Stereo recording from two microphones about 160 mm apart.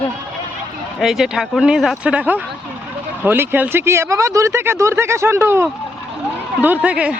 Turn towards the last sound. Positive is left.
turn(degrees=-5)  # may be behind; listen again after turning